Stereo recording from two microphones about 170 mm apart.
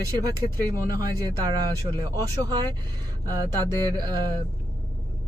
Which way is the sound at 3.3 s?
20° right (ahead or behind).